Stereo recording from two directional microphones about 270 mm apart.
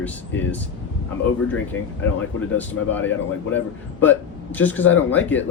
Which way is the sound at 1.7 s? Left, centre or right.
Left.